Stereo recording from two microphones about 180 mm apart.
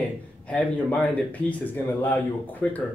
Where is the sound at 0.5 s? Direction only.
5° left (ahead or behind).